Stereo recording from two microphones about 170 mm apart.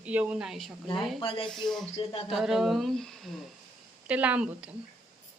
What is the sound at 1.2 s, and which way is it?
Speech, 30° left (ahead or behind).